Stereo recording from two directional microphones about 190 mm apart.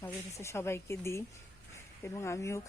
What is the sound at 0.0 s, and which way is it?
Speech, 15° left (ahead or behind).